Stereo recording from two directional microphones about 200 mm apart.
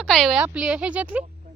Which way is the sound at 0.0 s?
Centre (ahead or behind).